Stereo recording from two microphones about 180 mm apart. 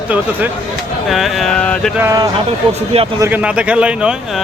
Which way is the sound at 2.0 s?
15° right (ahead or behind).